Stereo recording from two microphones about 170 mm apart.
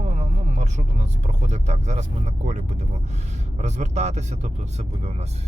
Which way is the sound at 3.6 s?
40° right (ahead or behind).